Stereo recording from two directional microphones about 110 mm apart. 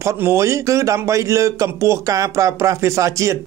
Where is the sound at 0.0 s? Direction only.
25° right (ahead or behind).